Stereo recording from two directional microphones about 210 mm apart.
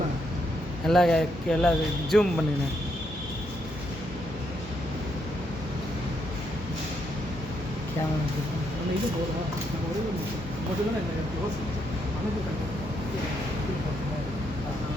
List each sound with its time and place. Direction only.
0.9 s speech: centre (ahead or behind)